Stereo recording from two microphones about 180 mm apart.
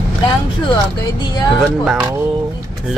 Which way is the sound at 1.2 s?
25° left (ahead or behind).